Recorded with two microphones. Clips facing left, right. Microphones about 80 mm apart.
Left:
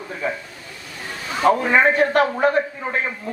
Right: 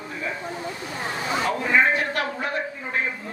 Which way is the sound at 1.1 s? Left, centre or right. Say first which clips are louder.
Right 2 dB; right.